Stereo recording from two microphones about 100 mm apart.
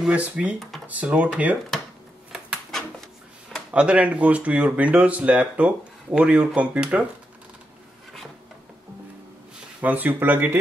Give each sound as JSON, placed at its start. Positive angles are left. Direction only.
{"t": 0.0, "sound": "speech", "side_deg": -15}
{"t": 0.6, "sound": "cash register", "side_deg": 0}
{"t": 0.8, "sound": "speech", "side_deg": -15}
{"t": 3.7, "sound": "speech", "side_deg": -10}
{"t": 9.8, "sound": "speech", "side_deg": -15}